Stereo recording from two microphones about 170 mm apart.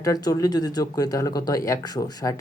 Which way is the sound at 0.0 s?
20° left (ahead or behind).